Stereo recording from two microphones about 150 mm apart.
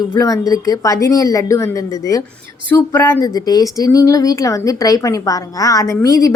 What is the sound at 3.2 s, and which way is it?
Speech, 25° left (ahead or behind).